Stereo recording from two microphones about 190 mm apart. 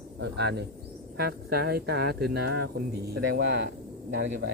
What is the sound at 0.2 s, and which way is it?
Speech, 60° right (ahead or behind).